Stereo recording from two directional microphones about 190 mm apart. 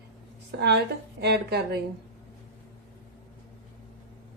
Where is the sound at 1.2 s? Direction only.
60° right (ahead or behind).